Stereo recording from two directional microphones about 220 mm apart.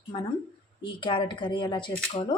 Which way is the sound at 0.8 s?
20° left (ahead or behind).